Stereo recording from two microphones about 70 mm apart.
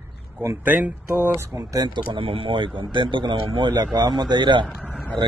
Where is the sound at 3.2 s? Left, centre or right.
Right.